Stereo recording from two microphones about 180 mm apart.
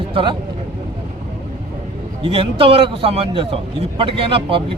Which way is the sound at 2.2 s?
30° right (ahead or behind).